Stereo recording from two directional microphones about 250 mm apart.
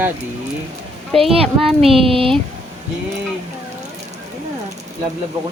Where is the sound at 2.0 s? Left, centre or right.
Right.